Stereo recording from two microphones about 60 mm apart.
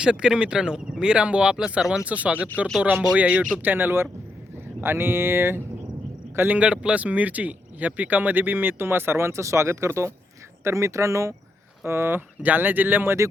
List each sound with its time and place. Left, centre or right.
0.0 s a man's voice: centre; by 6.6 s right
6.6 s speech: centre; by 11.3 s right
11.9 s speech: right
12.4 s speech: right